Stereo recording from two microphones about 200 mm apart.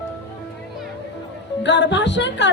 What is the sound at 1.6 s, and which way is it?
Speech, 60° left (ahead or behind).